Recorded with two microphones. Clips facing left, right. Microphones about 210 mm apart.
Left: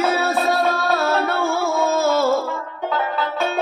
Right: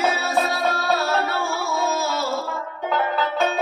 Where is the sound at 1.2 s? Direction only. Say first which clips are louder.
Left 5 dB; 55° left (ahead or behind).